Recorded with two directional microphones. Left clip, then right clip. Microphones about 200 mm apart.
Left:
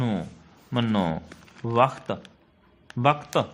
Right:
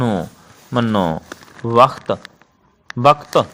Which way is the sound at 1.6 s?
25° right (ahead or behind).